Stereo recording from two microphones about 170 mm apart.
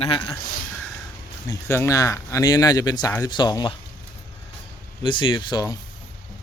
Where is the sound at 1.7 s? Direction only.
15° left (ahead or behind).